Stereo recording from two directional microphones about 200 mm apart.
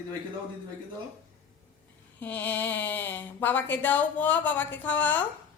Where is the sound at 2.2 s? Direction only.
10° left (ahead or behind).